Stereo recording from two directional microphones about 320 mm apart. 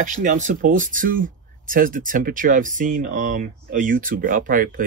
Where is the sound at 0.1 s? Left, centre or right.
Right.